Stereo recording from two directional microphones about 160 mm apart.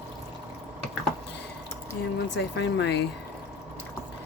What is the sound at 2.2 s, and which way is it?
Speech, 90° left.